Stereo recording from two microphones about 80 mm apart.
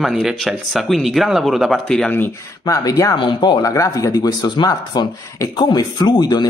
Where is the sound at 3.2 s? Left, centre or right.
Left.